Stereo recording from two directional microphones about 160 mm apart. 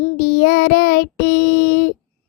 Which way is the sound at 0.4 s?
75° left (ahead or behind).